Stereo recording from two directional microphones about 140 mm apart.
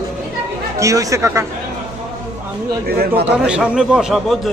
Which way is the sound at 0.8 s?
25° right (ahead or behind).